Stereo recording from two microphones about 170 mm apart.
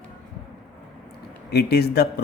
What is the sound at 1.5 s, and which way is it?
Speech, 70° left (ahead or behind).